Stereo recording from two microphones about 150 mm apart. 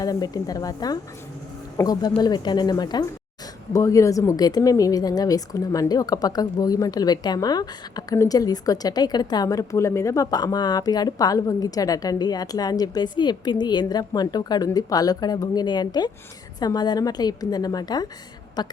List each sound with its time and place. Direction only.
0.0 s speech: 25° left (ahead or behind)